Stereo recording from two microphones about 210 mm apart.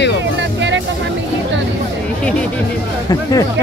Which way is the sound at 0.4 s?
55° right (ahead or behind).